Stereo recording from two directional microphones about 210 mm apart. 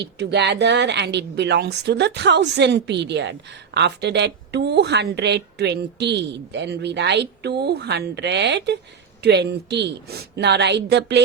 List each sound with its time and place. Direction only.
0.0 s a woman's voice: 55° right (ahead or behind)